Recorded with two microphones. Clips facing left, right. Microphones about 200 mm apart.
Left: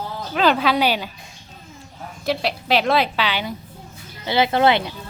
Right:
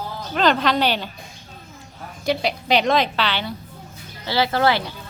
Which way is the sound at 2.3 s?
Centre (ahead or behind).